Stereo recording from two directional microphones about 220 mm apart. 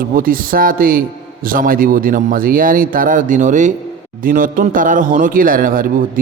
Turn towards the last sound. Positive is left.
turn(degrees=-40)  # may be behind; listen again after turning